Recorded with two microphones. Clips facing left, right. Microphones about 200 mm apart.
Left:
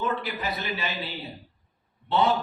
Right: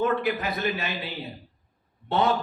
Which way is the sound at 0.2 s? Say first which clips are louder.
Right 5 dB; 50° right (ahead or behind).